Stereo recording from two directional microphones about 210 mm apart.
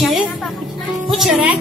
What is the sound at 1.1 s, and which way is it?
Speech, centre (ahead or behind).